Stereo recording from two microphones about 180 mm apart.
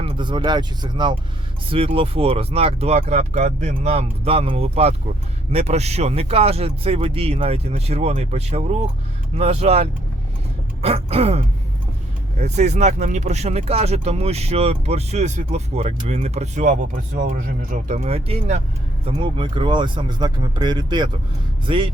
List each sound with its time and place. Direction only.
0.0 s speech: 30° right (ahead or behind)